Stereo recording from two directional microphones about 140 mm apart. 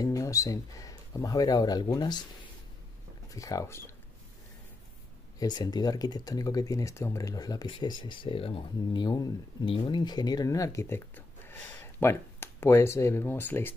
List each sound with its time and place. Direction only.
0.0 s speech: 25° left (ahead or behind)
3.3 s speech: 25° left (ahead or behind)
5.4 s speech: 30° left (ahead or behind)